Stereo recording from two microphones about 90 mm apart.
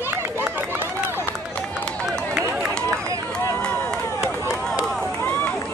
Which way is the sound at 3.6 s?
15° left (ahead or behind).